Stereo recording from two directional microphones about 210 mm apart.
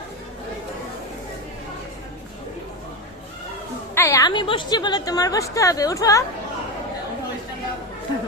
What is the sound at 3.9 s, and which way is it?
A woman's voice, 15° left (ahead or behind).